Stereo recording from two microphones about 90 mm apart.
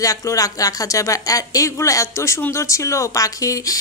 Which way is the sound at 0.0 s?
40° left (ahead or behind).